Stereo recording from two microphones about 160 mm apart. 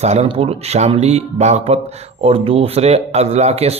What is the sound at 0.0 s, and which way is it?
Speech, 40° right (ahead or behind).